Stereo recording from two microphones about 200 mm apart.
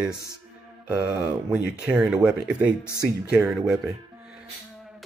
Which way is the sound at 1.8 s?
5° right (ahead or behind).